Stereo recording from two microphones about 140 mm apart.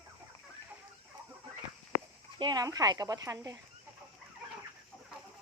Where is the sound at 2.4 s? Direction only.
30° right (ahead or behind).